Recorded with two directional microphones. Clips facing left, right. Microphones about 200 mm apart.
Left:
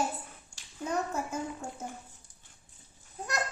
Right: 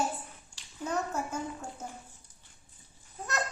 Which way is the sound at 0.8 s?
10° left (ahead or behind).